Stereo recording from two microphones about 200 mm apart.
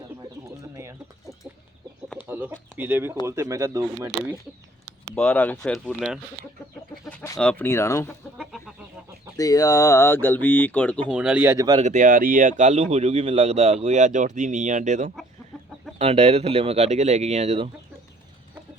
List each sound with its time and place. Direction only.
0.6 s bird: 15° right (ahead or behind)
2.2 s a sound: 10° right (ahead or behind)
3.2 s speech: 15° right (ahead or behind)
5.1 s speech: 10° left (ahead or behind)
7.0 s chicken: 5° left (ahead or behind)
7.3 s speech: 5° left (ahead or behind)
8.4 s chicken: 5° right (ahead or behind)
9.4 s speech: 15° left (ahead or behind)
11.1 s speech: 5° right (ahead or behind)
11.8 s speech: 40° right (ahead or behind)